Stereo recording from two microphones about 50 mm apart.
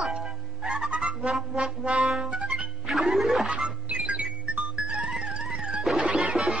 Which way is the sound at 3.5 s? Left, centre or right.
Right.